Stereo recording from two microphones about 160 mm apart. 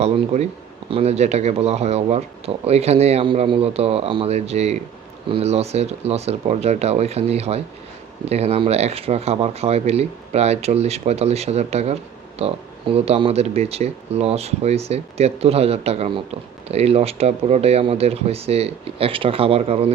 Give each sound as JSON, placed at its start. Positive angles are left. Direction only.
{"t": 0.3, "sound": "speech", "side_deg": -45}